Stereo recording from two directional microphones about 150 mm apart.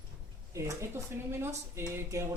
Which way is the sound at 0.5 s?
20° right (ahead or behind).